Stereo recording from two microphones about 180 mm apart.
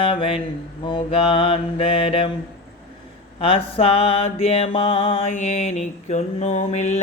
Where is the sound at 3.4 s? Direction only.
30° left (ahead or behind).